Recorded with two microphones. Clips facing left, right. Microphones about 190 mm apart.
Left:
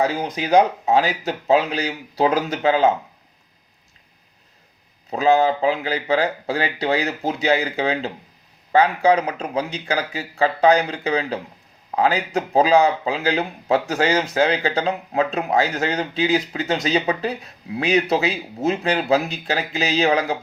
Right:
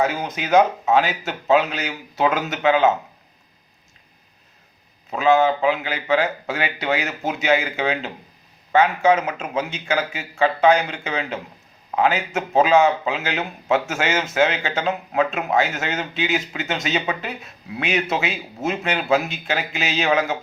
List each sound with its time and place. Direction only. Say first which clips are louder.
0.0 s speech: left 1 dB; 35° left (ahead or behind)
5.1 s speech: even; 35° left (ahead or behind)